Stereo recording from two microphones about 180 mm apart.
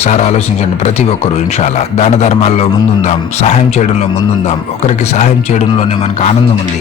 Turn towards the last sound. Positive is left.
turn(degrees=40)  # may be behind; listen again after turning